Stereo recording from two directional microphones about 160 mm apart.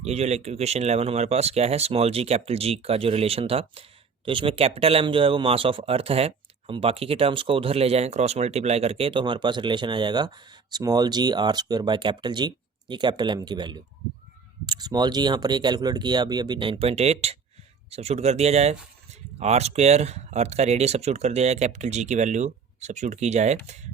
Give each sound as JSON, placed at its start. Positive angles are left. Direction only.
{"t": 0.0, "sound": "speech", "side_deg": -45}